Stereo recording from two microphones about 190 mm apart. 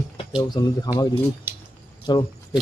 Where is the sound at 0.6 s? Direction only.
20° left (ahead or behind).